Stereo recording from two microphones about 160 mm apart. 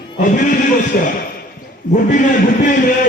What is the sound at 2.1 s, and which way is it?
Speech, 50° left (ahead or behind).